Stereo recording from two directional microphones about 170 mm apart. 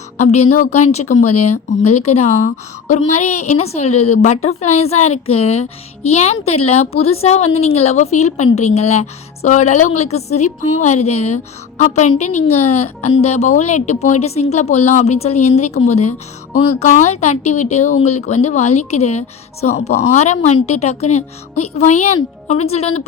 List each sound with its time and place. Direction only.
0.2 s a woman's voice: 40° left (ahead or behind)